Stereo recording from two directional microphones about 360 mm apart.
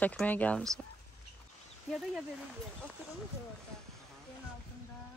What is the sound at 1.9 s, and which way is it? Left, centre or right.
Speech, centre.